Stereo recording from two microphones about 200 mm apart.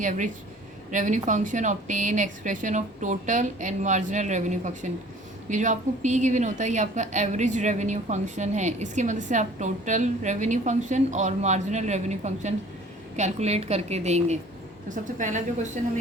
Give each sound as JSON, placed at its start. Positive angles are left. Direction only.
{"t": 0.0, "sound": "a woman's voice", "side_deg": -40}